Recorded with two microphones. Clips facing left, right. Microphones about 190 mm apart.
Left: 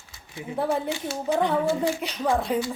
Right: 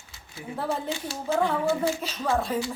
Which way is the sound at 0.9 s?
20° left (ahead or behind).